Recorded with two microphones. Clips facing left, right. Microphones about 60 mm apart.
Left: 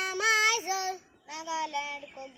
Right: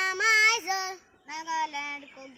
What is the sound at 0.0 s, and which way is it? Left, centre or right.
Child singing, right.